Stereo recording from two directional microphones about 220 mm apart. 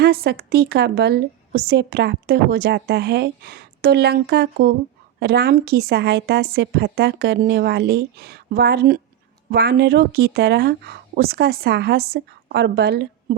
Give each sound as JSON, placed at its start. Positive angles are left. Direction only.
{"t": 0.0, "sound": "a woman's voice", "side_deg": -45}